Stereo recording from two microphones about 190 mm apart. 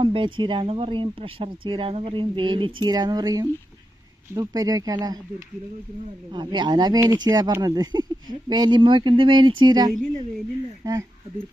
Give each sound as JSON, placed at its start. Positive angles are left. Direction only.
{"t": 0.0, "sound": "speech", "side_deg": -25}
{"t": 6.3, "sound": "speech", "side_deg": -25}